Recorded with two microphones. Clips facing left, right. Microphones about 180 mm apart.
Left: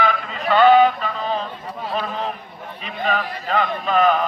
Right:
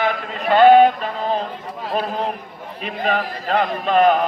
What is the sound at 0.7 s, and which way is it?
Mantra, 45° right (ahead or behind).